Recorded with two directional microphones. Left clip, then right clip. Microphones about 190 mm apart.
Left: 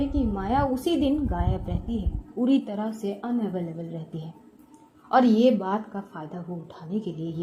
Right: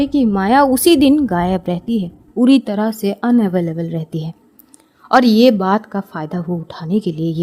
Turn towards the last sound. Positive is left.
turn(degrees=-45)  # may be behind; listen again after turning